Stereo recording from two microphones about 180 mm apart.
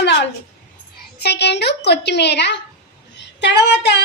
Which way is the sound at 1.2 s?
65° left (ahead or behind).